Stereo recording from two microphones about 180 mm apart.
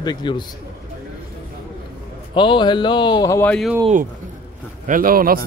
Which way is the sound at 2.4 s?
25° left (ahead or behind).